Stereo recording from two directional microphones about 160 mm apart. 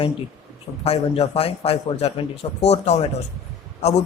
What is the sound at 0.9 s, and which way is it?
Speech, 40° left (ahead or behind).